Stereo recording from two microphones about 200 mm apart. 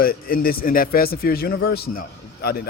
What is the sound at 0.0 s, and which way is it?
Speech, 45° left (ahead or behind).